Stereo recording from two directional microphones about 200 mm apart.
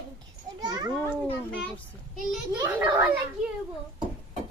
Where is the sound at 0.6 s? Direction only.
20° right (ahead or behind).